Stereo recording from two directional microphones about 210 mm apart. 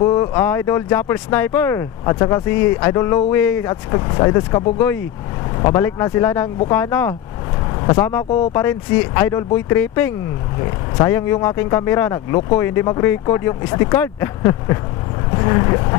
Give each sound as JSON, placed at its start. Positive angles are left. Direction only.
{"t": 0.0, "sound": "speech", "side_deg": 15}